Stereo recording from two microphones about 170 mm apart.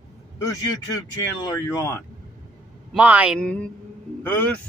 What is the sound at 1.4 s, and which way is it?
Speech, 20° left (ahead or behind).